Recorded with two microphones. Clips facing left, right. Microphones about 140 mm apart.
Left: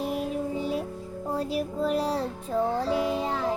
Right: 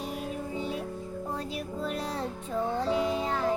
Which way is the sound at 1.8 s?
35° left (ahead or behind).